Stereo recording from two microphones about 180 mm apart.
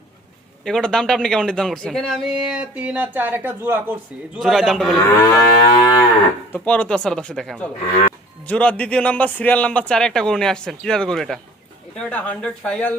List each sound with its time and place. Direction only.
0.6 s a man's voice: 5° left (ahead or behind)
4.4 s a man's voice: centre (ahead or behind)
5.2 s livestock: 20° left (ahead or behind)
6.5 s a man's voice: 5° left (ahead or behind)